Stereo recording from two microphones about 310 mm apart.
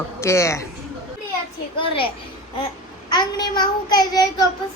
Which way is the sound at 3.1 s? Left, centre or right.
Centre.